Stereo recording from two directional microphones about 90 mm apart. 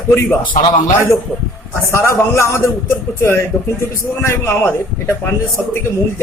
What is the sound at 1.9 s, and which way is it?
Speech, 30° left (ahead or behind).